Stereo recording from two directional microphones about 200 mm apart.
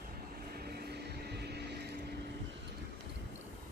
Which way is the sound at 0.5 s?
50° right (ahead or behind).